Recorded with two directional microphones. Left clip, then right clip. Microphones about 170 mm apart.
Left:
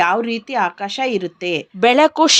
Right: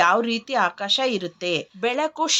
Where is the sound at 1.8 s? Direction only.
55° left (ahead or behind).